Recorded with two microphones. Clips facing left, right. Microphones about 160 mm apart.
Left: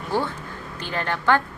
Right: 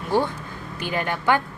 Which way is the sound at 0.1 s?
15° right (ahead or behind).